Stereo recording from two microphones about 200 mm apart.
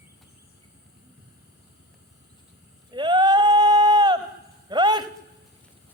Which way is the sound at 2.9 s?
20° right (ahead or behind).